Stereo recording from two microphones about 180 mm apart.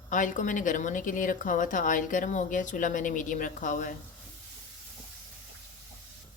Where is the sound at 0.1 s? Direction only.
45° left (ahead or behind).